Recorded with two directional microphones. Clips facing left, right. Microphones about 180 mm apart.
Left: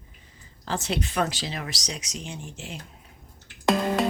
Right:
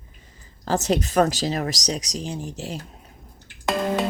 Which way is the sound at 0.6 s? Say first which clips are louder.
Right 7 dB; 40° right (ahead or behind).